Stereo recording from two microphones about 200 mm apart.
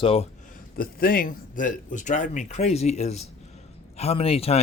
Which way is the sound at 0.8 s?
45° left (ahead or behind).